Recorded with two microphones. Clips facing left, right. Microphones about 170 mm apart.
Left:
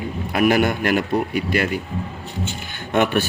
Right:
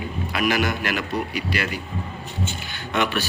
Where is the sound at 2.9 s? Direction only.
50° left (ahead or behind).